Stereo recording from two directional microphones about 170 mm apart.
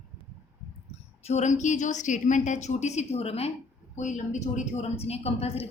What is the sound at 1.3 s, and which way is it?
A woman's voice, 45° left (ahead or behind).